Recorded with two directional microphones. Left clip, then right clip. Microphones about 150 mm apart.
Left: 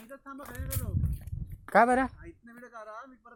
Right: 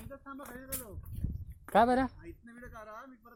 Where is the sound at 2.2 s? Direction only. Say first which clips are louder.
Left 1 dB; 30° left (ahead or behind).